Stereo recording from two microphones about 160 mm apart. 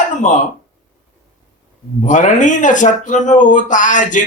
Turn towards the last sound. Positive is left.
turn(degrees=50)  # may be behind; listen again after turning